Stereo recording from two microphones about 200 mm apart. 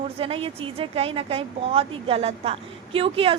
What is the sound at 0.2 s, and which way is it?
A woman's voice, 30° right (ahead or behind).